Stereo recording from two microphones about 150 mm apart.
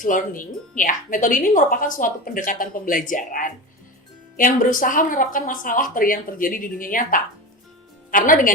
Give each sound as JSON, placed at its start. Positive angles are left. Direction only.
{"t": 0.0, "sound": "speech", "side_deg": 60}